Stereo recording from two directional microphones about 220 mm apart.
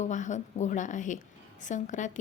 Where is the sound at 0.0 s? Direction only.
35° left (ahead or behind).